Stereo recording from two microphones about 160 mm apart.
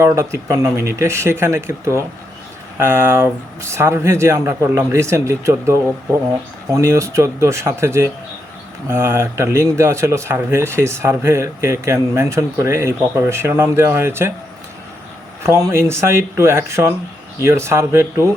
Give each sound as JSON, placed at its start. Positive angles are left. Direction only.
{"t": 0.0, "sound": "a man's voice", "side_deg": -20}
{"t": 15.4, "sound": "a man's voice", "side_deg": -15}